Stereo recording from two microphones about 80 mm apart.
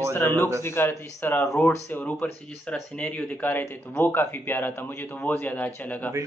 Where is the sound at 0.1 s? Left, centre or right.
Left.